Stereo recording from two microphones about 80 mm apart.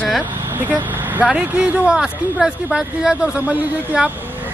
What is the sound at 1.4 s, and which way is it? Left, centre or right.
Speech, centre.